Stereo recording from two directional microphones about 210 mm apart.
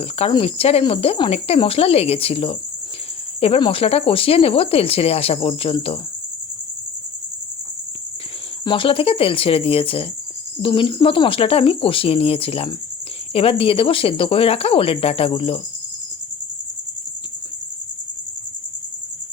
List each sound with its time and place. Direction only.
0.0 s cricket: 25° left (ahead or behind)
8.6 s cricket: 25° left (ahead or behind)